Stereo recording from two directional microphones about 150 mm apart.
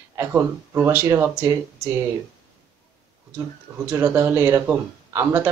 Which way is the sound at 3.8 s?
15° right (ahead or behind).